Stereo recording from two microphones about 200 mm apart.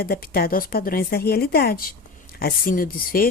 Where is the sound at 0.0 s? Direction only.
50° left (ahead or behind).